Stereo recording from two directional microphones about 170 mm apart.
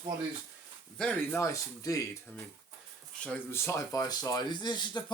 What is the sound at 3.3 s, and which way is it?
Speech, 15° left (ahead or behind).